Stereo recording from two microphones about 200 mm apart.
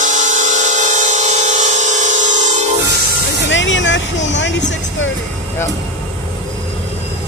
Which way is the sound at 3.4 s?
65° left (ahead or behind).